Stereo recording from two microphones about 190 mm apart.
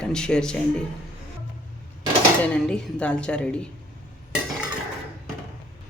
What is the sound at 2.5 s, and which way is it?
Speech, 5° left (ahead or behind).